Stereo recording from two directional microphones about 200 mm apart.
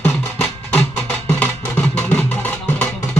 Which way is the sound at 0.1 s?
Centre (ahead or behind).